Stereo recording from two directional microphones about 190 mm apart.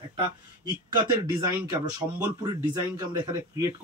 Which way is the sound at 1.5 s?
10° right (ahead or behind).